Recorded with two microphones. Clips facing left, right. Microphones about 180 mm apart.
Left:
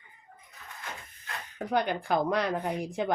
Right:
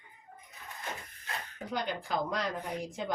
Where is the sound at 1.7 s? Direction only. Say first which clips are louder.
Left 6 dB; 60° left (ahead or behind).